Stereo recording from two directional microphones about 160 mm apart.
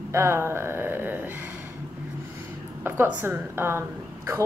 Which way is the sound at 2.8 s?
15° right (ahead or behind).